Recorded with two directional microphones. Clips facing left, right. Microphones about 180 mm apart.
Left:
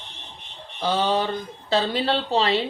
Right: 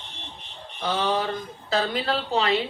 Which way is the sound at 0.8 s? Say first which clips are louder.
Left 3 dB; 30° left (ahead or behind).